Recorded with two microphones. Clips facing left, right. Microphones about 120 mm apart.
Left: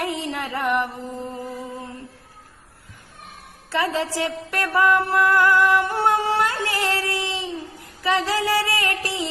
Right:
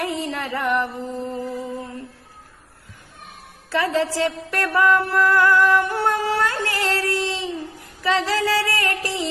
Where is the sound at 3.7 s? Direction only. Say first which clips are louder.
Right 2 dB; 20° left (ahead or behind).